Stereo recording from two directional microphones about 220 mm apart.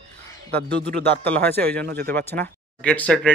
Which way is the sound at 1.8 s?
45° right (ahead or behind).